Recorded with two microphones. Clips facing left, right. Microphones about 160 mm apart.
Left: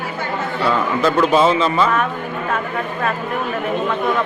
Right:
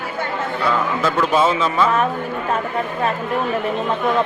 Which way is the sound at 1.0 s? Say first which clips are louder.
Left 4 dB; centre (ahead or behind).